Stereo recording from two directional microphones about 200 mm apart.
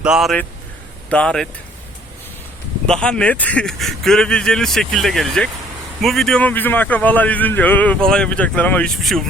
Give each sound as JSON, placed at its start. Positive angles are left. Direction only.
{"t": 0.0, "sound": "speech", "side_deg": 0}
{"t": 2.8, "sound": "a man's voice", "side_deg": 5}